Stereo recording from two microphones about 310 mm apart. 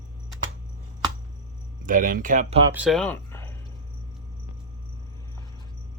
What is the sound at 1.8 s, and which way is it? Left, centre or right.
Speech, right.